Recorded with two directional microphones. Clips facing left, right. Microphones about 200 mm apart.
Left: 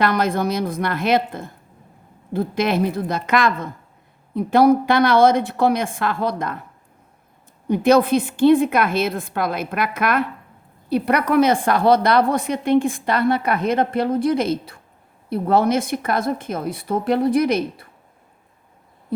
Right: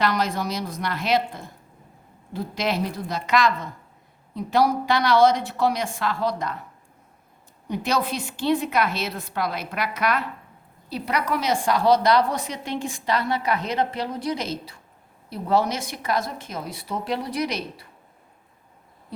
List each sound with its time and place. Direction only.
0.0 s a woman's voice: 55° left (ahead or behind)
7.7 s a woman's voice: 55° left (ahead or behind)